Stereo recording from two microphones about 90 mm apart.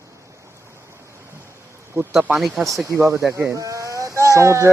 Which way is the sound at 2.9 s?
30° right (ahead or behind).